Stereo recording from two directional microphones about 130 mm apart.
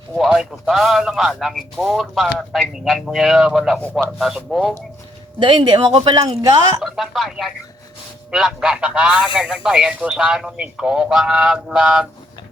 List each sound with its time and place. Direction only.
0.2 s speech: centre (ahead or behind)
5.4 s speech: 40° right (ahead or behind)
6.7 s speech: centre (ahead or behind)